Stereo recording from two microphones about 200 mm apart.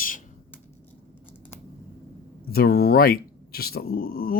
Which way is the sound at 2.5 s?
50° left (ahead or behind).